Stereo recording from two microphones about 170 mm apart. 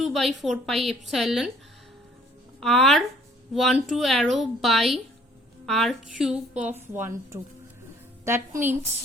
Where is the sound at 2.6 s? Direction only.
5° left (ahead or behind); by 8.7 s 15° right (ahead or behind).